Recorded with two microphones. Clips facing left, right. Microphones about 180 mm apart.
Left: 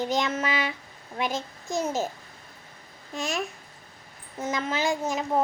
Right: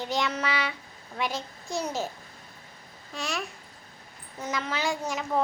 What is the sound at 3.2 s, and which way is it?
A child's voice, 20° left (ahead or behind).